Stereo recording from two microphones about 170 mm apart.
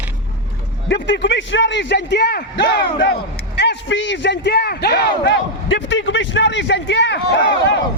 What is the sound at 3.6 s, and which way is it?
A man's voice, 90° left.